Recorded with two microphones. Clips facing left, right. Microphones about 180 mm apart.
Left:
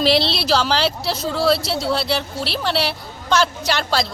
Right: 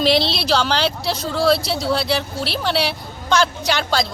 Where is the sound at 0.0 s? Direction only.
Centre (ahead or behind).